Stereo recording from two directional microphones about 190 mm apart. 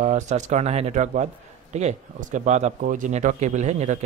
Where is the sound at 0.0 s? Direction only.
40° right (ahead or behind).